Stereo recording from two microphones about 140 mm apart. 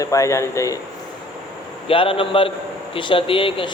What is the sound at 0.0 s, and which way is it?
Speech, 20° left (ahead or behind).